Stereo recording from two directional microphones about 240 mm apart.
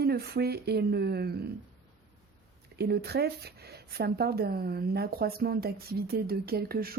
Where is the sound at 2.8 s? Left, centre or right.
Right.